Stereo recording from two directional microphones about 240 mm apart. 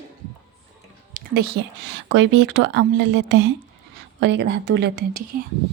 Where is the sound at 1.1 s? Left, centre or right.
Right.